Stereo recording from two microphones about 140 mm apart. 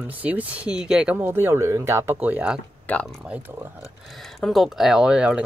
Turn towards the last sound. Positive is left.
turn(degrees=-5)  # may be behind; listen again after turning